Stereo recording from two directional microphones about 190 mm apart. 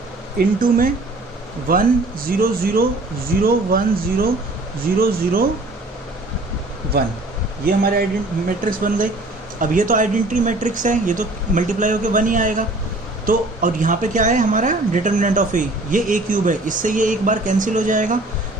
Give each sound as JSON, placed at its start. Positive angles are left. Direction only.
{"t": 0.3, "sound": "speech", "side_deg": -50}
{"t": 7.6, "sound": "speech", "side_deg": -50}